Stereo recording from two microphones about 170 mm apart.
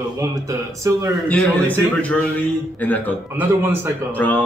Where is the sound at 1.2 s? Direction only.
10° left (ahead or behind).